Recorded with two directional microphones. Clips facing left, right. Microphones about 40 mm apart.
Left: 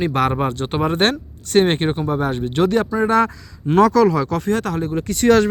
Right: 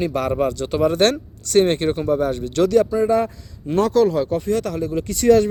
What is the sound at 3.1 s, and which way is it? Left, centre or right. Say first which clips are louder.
Speech: left 2 dB; left.